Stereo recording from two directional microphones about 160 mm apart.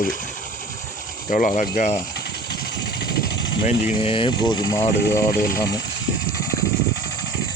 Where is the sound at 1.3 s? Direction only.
60° left (ahead or behind).